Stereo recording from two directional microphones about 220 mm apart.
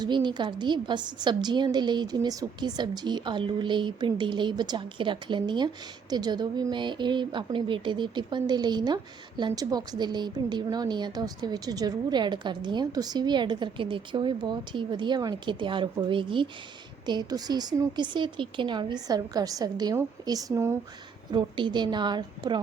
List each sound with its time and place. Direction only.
0.0 s a woman's voice: 20° right (ahead or behind)